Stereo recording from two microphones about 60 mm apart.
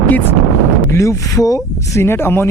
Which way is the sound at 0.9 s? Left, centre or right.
Left.